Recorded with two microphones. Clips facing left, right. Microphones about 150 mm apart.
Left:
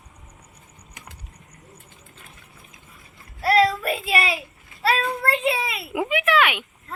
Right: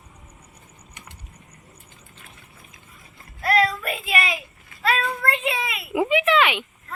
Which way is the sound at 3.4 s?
35° left (ahead or behind).